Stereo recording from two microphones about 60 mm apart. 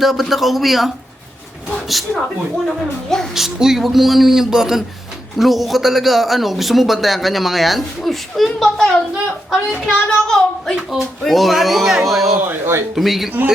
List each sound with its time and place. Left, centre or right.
0.0 s a child's voice: centre
3.3 s a child's voice: centre
12.5 s speech: right
13.0 s speech: centre